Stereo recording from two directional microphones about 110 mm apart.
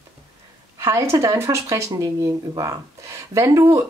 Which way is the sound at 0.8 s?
25° right (ahead or behind).